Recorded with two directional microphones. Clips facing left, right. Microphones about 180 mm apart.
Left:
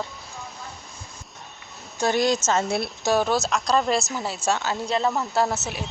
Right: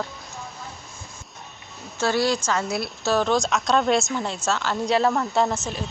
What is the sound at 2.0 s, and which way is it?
Speech, 20° left (ahead or behind).